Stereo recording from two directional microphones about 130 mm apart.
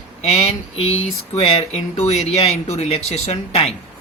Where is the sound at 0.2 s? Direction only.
55° left (ahead or behind).